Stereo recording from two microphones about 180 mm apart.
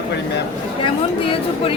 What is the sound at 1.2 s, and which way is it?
Speech, 30° left (ahead or behind).